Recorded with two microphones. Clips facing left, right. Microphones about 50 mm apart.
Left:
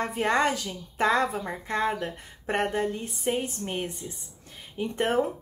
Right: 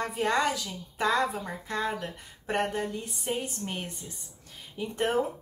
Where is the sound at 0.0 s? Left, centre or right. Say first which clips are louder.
Left 2 dB; left.